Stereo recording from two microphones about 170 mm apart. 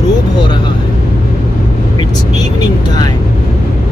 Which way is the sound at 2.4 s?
25° left (ahead or behind).